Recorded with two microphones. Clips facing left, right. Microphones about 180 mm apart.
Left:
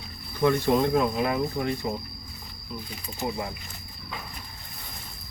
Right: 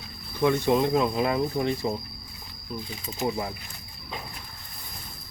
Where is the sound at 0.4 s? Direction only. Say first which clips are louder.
Even; 15° right (ahead or behind).